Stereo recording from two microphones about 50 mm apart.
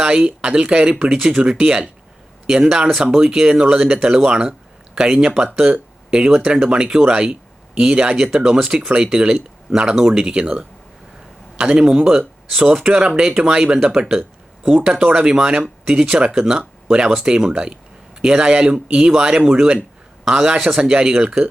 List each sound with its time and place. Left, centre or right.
0.0 s speech: centre
17.3 s speech: centre